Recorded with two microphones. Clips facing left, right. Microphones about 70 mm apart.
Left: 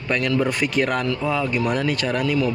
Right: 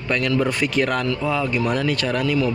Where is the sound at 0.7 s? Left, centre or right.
Centre.